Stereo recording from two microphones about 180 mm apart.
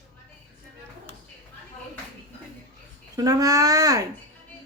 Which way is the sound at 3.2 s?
20° right (ahead or behind).